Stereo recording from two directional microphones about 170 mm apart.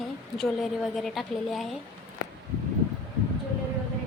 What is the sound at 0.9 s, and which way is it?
Speech, centre (ahead or behind).